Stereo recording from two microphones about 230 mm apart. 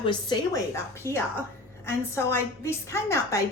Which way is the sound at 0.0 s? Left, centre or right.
Centre.